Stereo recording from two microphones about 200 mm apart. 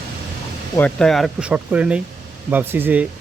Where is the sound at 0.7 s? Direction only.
5° left (ahead or behind); by 3.0 s 10° right (ahead or behind).